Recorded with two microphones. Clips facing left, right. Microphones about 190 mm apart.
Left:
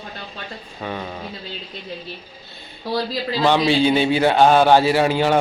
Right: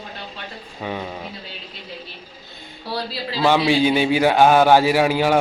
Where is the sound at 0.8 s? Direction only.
10° right (ahead or behind).